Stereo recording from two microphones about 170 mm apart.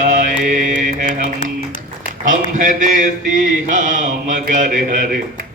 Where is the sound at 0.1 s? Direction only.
50° right (ahead or behind).